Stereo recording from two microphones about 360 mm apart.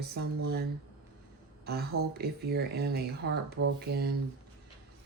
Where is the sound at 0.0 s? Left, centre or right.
Right.